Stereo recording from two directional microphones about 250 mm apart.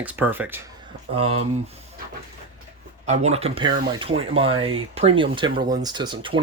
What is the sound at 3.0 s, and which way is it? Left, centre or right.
Speech, right.